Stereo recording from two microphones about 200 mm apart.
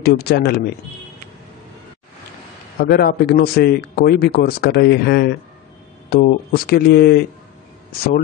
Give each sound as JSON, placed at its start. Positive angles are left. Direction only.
{"t": 0.0, "sound": "speech", "side_deg": 55}
{"t": 2.8, "sound": "speech", "side_deg": 50}